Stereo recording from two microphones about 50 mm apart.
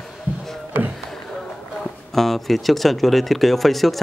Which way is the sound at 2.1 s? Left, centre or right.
Centre.